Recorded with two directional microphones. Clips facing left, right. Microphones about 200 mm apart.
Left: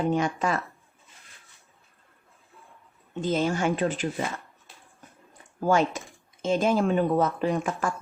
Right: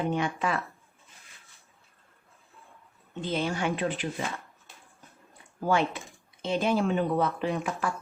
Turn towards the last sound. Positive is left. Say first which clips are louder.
# left 3 dB
turn(degrees=45)  # may be behind; listen again after turning